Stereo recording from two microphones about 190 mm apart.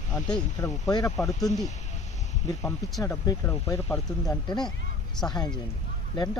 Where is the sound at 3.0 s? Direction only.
15° left (ahead or behind).